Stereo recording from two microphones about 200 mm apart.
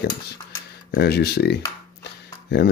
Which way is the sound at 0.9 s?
55° left (ahead or behind).